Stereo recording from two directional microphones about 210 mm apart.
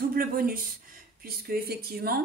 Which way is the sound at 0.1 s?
45° right (ahead or behind).